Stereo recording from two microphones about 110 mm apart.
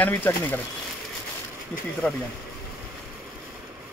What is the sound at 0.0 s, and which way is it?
Speech, 20° left (ahead or behind).